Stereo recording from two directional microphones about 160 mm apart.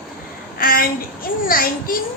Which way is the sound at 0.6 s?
65° left (ahead or behind).